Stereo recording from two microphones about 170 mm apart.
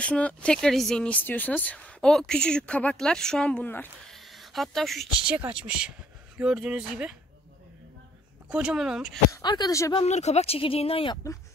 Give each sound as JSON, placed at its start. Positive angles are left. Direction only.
{"t": 0.0, "sound": "speech", "side_deg": 5}
{"t": 4.2, "sound": "a sound", "side_deg": 0}
{"t": 5.4, "sound": "speech", "side_deg": -5}
{"t": 8.5, "sound": "speech", "side_deg": -5}
{"t": 9.3, "sound": "speech", "side_deg": 25}
{"t": 9.9, "sound": "speech", "side_deg": 40}